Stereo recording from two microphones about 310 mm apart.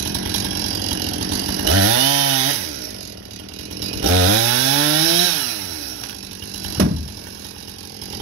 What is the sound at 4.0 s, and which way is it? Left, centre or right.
Chainsaw, right.